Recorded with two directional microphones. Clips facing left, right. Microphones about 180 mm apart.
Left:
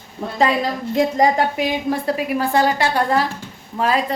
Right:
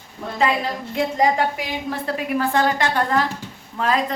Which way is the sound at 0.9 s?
40° left (ahead or behind).